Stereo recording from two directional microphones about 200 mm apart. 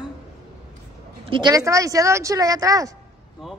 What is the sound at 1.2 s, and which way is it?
Speech, 20° right (ahead or behind).